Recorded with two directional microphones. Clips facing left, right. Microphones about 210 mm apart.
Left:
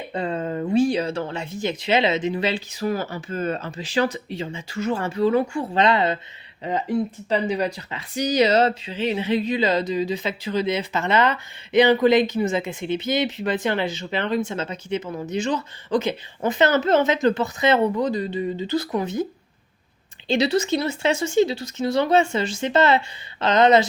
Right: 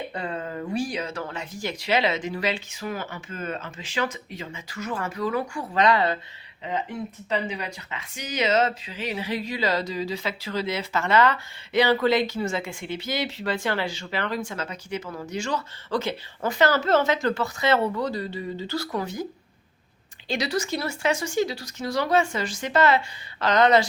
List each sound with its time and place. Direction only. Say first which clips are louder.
0.1 s speech: left 6 dB; 25° left (ahead or behind)
6.7 s speech: left 7 dB; 40° left (ahead or behind); by 23.8 s 20° left (ahead or behind)